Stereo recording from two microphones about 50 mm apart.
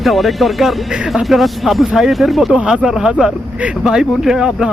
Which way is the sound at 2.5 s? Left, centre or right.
Right.